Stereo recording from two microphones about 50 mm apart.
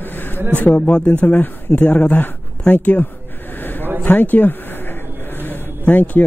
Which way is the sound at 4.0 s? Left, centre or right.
Left.